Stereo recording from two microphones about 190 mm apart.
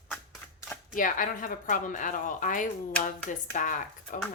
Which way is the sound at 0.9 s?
45° left (ahead or behind).